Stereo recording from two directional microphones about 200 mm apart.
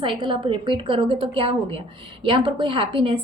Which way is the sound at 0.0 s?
25° right (ahead or behind).